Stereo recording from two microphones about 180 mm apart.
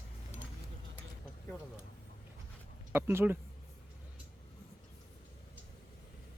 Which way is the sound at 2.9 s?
10° right (ahead or behind).